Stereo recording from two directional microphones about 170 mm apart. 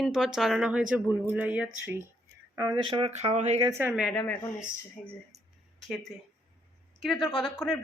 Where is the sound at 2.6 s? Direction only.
25° right (ahead or behind); by 3.7 s 40° right (ahead or behind).